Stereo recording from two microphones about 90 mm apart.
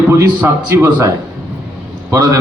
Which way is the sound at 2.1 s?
40° right (ahead or behind).